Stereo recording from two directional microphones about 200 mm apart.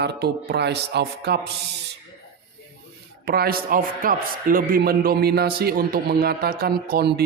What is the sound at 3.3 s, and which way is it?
A man's voice, 50° right (ahead or behind).